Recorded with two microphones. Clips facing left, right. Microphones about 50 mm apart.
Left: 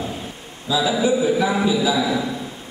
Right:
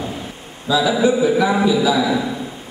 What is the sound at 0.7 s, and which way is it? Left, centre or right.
Speech, right.